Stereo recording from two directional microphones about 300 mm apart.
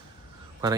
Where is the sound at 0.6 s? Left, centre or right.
Centre.